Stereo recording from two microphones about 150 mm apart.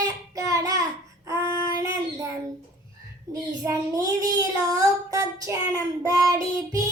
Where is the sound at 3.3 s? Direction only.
25° right (ahead or behind).